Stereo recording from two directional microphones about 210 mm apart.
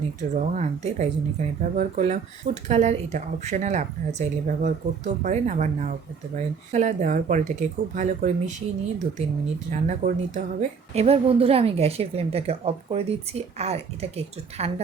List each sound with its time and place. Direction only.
0.2 s speech: 35° right (ahead or behind)
9.8 s a woman's voice: 40° right (ahead or behind)